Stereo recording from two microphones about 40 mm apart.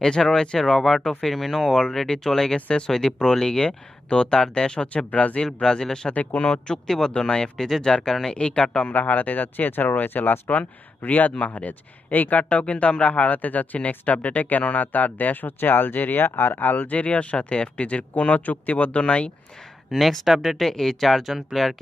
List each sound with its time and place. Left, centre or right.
0.0 s speech: centre
0.6 s speech: centre
4.9 s speech: left
5.6 s speech: centre
6.1 s speech: left
6.7 s speech: centre
8.8 s speech: left
10.5 s speech: left
16.8 s speech: left
19.9 s speech: centre
20.2 s speech: centre
20.5 s speech: centre